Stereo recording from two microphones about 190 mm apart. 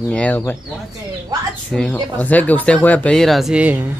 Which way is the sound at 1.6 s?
5° left (ahead or behind).